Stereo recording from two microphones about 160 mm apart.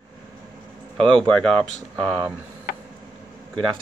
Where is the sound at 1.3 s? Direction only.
5° left (ahead or behind).